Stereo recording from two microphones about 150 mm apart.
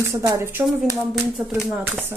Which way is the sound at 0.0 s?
20° right (ahead or behind).